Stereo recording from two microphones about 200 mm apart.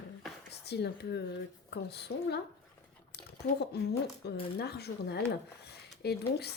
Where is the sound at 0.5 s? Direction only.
55° left (ahead or behind).